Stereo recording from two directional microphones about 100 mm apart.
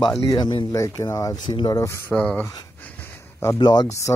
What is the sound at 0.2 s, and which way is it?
Speech, 40° left (ahead or behind).